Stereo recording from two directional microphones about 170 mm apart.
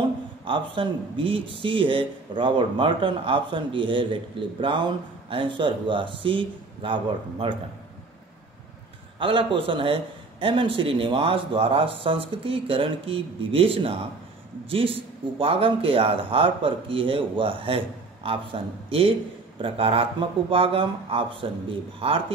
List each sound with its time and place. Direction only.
0.5 s speech: 30° right (ahead or behind)
9.2 s speech: 30° right (ahead or behind)